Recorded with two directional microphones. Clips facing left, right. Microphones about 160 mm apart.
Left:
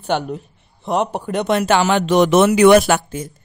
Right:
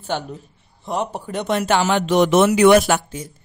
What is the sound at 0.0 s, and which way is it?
Speech, 65° left (ahead or behind).